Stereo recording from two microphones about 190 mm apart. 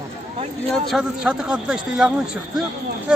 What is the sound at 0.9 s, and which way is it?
Speech, centre (ahead or behind).